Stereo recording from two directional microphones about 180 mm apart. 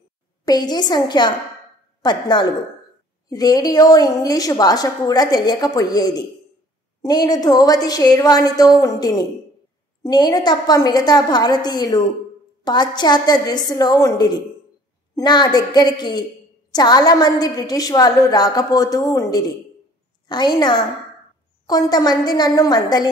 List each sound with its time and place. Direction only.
0.5 s a woman's voice: 25° left (ahead or behind)